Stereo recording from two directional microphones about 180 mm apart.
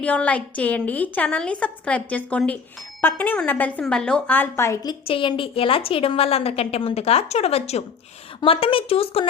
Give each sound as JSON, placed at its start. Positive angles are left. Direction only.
{"t": 0.0, "sound": "a woman's voice", "side_deg": 5}